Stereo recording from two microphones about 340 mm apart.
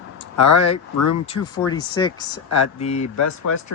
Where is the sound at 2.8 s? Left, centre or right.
Centre.